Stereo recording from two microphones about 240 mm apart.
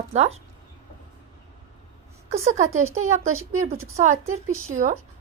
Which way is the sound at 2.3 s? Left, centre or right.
Right.